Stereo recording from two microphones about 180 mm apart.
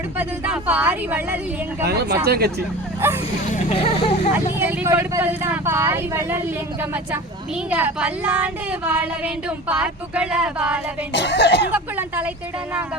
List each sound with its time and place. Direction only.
0.2 s speech: 5° right (ahead or behind)
1.9 s speech: 65° right (ahead or behind)
3.0 s speech: 10° right (ahead or behind)
3.5 s speech: 35° left (ahead or behind)
4.5 s speech: 10° right (ahead or behind)
11.1 s speech: 70° left (ahead or behind)
11.7 s speech: 10° right (ahead or behind)